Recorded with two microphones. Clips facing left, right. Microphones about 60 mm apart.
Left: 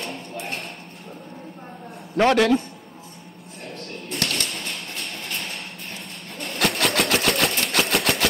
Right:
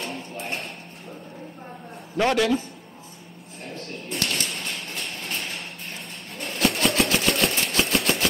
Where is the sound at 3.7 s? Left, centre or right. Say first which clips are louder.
Right 1 dB; left.